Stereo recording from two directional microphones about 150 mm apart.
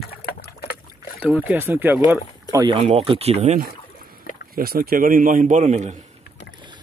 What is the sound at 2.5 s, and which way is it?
Speech, 30° right (ahead or behind).